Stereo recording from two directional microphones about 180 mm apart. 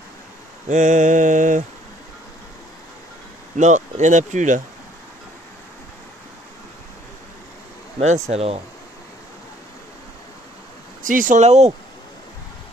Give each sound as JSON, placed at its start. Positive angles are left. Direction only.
{"t": 0.7, "sound": "speech", "side_deg": -40}
{"t": 3.5, "sound": "speech", "side_deg": -40}
{"t": 8.0, "sound": "speech", "side_deg": -40}
{"t": 11.0, "sound": "speech", "side_deg": -45}